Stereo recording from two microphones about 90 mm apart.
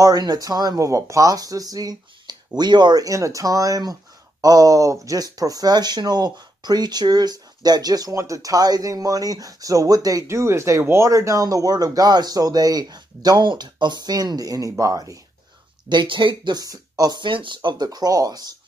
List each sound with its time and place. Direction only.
0.0 s speech: 45° right (ahead or behind)
10.2 s speech: 30° right (ahead or behind)
15.9 s speech: 60° right (ahead or behind)
17.8 s speech: 45° right (ahead or behind)